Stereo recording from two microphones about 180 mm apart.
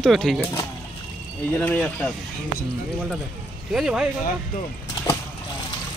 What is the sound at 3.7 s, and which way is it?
Speech, 5° right (ahead or behind).